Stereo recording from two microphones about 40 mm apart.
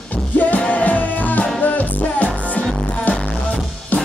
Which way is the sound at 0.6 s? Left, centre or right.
Left.